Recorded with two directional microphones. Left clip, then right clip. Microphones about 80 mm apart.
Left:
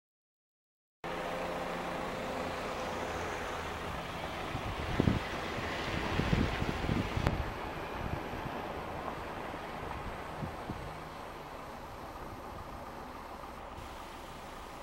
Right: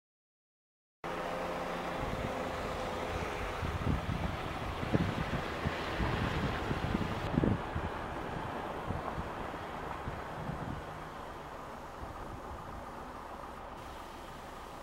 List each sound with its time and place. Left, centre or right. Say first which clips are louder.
1.0 s vehicle: even; centre; by 9.9 s left